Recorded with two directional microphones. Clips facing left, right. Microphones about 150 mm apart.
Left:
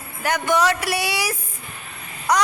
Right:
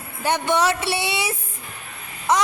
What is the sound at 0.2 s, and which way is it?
A woman's voice, 25° right (ahead or behind).